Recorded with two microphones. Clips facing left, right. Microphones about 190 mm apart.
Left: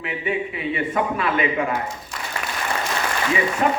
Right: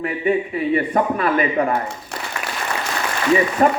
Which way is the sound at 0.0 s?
45° right (ahead or behind).